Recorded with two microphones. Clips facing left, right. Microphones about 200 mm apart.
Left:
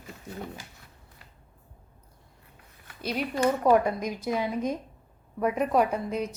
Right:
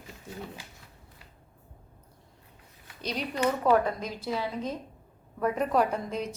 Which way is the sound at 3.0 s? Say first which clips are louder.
Left 3 dB; 5° left (ahead or behind).